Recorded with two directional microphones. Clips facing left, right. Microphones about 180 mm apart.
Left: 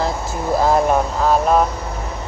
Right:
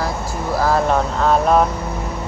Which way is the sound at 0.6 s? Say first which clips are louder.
Left 1 dB; 20° left (ahead or behind).